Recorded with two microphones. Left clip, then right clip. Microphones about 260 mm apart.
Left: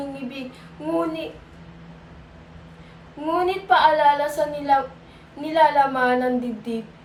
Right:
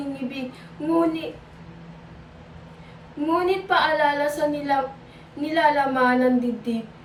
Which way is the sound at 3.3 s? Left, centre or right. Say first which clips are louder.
Left 2 dB; centre.